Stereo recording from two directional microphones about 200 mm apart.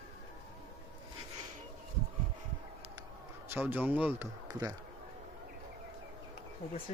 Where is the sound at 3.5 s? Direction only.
10° right (ahead or behind).